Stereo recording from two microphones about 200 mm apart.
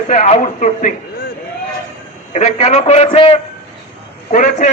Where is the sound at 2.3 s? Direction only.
35° left (ahead or behind).